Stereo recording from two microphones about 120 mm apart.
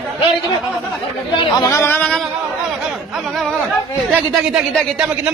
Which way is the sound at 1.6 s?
25° left (ahead or behind).